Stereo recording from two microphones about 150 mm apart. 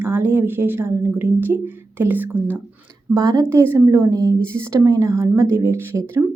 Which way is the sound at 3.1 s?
25° right (ahead or behind).